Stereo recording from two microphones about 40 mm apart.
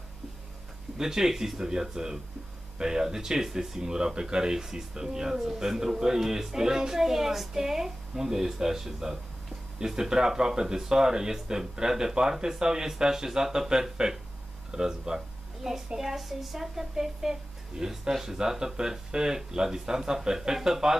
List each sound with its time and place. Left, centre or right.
0.9 s a woman's voice: centre